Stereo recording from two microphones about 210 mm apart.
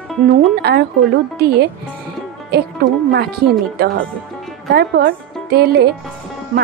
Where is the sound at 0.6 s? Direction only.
50° right (ahead or behind).